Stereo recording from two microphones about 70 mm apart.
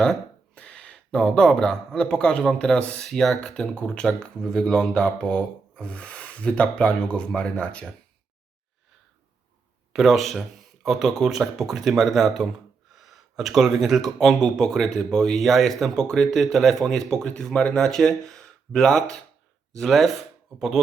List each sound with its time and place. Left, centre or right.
0.0 s speech: centre
3.0 s speech: centre
9.9 s speech: centre